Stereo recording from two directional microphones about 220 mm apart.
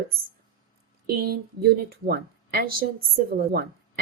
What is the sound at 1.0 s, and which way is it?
Speech, 45° right (ahead or behind).